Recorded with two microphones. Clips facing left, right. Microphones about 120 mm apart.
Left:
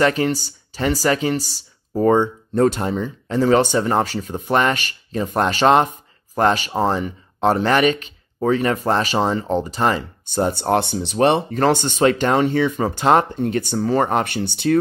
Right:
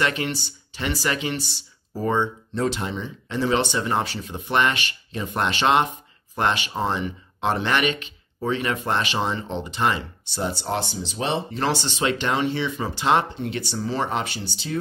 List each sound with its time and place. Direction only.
0.0 s speech: 40° left (ahead or behind); by 14.8 s 60° left (ahead or behind)